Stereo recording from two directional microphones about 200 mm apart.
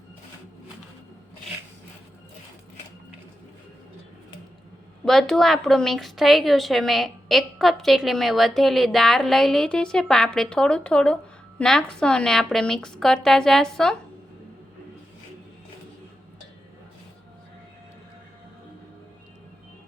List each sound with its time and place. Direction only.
5.0 s a woman's voice: centre (ahead or behind)